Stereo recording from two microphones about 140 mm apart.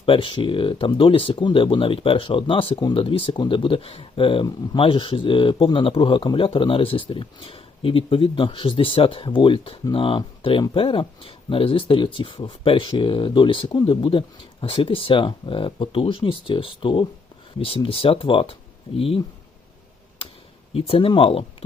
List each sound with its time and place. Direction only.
0.0 s speech: 40° left (ahead or behind)
20.2 s a sound: 40° left (ahead or behind)
20.7 s speech: 45° left (ahead or behind)